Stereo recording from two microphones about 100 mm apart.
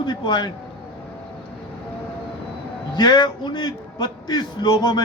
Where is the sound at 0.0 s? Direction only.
50° left (ahead or behind).